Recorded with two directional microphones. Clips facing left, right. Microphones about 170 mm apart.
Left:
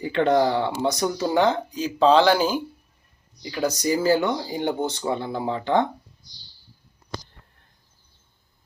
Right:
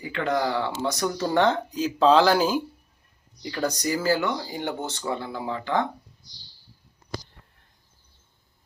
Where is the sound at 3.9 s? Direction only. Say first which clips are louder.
Left 5 dB; 20° left (ahead or behind).